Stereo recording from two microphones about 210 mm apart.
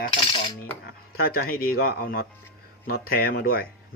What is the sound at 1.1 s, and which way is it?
Cutlery, 45° left (ahead or behind).